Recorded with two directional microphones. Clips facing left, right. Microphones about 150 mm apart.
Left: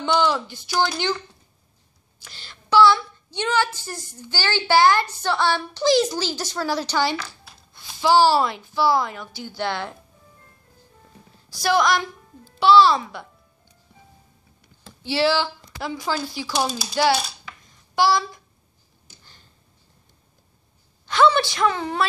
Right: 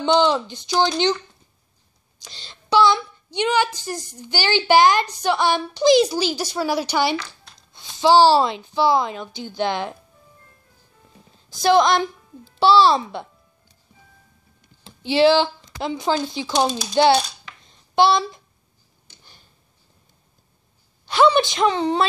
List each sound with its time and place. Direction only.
0.0 s a woman's voice: 20° right (ahead or behind)
2.2 s a woman's voice: 20° right (ahead or behind)
7.2 s a sound: 5° left (ahead or behind)
7.7 s a woman's voice: 20° right (ahead or behind)
11.6 s a woman's voice: 25° right (ahead or behind)
15.0 s a woman's voice: 20° right (ahead or behind)
17.6 s a sound: 25° right (ahead or behind)
21.1 s a woman's voice: 15° right (ahead or behind)